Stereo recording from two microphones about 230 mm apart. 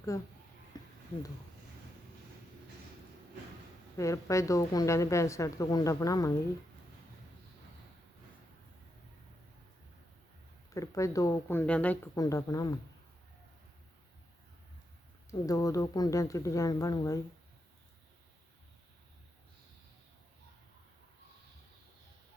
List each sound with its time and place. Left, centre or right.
0.7 s a sound: centre
3.9 s a woman's voice: centre
10.8 s a woman's voice: centre
15.3 s a woman's voice: centre